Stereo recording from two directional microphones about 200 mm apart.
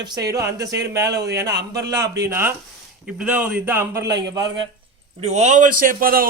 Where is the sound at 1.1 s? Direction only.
55° right (ahead or behind).